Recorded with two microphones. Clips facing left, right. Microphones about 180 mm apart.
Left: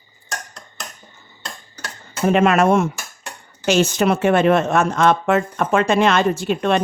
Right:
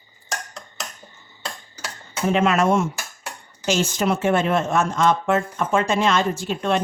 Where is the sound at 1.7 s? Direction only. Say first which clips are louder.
Even; 10° right (ahead or behind).